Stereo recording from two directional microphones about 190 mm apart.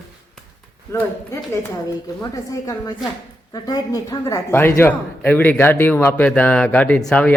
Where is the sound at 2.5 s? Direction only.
20° left (ahead or behind).